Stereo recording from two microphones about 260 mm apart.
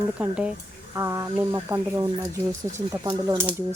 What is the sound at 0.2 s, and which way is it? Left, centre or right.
Speech, centre.